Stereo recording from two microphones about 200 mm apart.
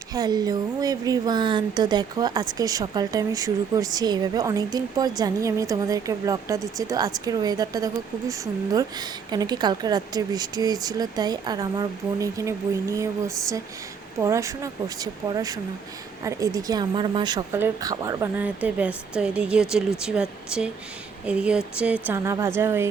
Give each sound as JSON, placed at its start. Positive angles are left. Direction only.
{"t": 0.1, "sound": "speech", "side_deg": -20}